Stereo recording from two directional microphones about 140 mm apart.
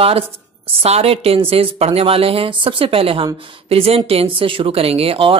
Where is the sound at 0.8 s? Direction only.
45° right (ahead or behind).